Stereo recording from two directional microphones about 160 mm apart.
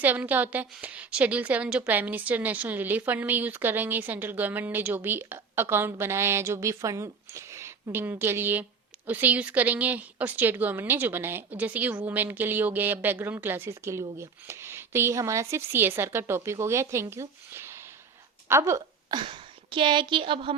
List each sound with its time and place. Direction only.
0.0 s a woman's voice: 10° right (ahead or behind)
19.1 s speech: 30° right (ahead or behind)